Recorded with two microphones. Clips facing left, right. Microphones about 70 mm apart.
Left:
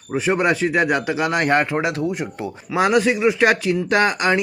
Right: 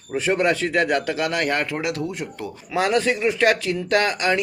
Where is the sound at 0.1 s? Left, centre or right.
Centre.